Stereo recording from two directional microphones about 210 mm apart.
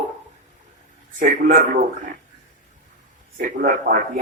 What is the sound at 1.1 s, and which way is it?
Speech, 40° right (ahead or behind).